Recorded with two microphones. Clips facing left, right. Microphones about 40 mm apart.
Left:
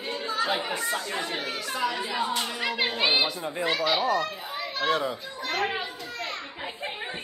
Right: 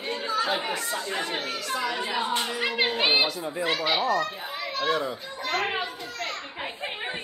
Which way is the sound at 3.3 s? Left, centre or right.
Left.